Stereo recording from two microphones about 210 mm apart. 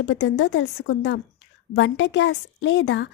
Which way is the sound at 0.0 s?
60° left (ahead or behind).